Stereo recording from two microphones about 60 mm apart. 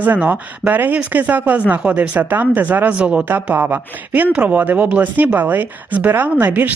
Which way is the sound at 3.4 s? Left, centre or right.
Right.